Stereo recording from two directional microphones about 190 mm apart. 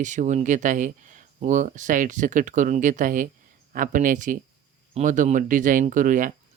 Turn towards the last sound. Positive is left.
turn(degrees=-45)  # may be behind; listen again after turning